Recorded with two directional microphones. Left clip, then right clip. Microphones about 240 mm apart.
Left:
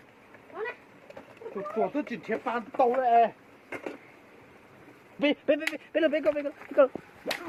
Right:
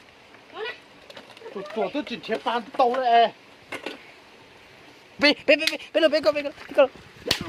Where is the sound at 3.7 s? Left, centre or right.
Right.